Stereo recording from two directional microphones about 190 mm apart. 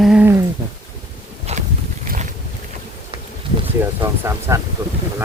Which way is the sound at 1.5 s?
35° right (ahead or behind).